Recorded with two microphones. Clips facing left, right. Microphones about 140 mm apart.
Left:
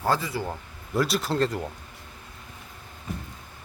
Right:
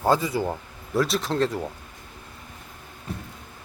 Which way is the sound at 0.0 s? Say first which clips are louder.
Right 4 dB; 15° right (ahead or behind).